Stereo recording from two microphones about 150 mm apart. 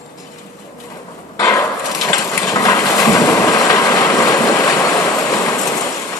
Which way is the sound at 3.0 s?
20° left (ahead or behind).